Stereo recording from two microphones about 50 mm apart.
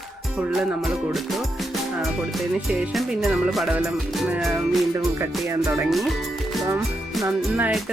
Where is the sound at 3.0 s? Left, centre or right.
Centre.